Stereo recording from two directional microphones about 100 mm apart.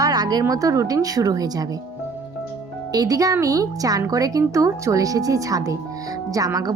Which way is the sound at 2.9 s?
35° right (ahead or behind).